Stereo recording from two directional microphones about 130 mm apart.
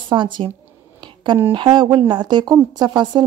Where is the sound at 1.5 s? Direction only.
35° right (ahead or behind).